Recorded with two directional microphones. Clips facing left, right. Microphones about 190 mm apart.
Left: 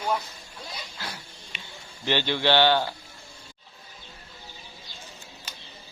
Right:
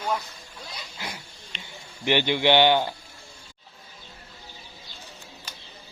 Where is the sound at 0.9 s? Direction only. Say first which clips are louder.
Right 4 dB; 15° right (ahead or behind).